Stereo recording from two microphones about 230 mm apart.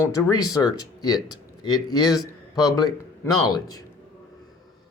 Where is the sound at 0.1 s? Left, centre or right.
Centre.